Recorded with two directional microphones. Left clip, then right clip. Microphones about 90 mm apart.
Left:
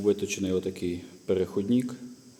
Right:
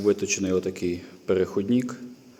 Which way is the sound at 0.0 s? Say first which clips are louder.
Right 3 dB; 20° left (ahead or behind).